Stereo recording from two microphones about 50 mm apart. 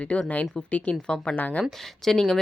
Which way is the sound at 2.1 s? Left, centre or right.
Centre.